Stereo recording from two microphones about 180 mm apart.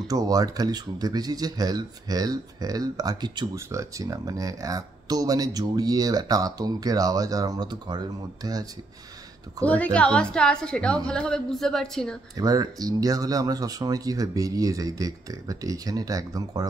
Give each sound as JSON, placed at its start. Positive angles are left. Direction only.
{"t": 0.1, "sound": "speech", "side_deg": -20}
{"t": 9.7, "sound": "a woman's voice", "side_deg": 5}
{"t": 12.4, "sound": "speech", "side_deg": -20}